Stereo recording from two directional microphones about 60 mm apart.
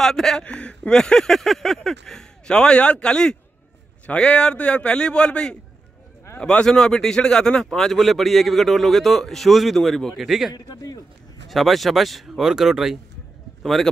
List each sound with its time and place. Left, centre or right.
0.0 s speech: centre
0.5 s a sound: centre
6.6 s speech: centre
10.5 s speech: left
11.4 s speech: centre